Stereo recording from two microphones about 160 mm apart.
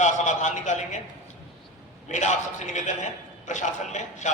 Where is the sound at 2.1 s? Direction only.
50° left (ahead or behind).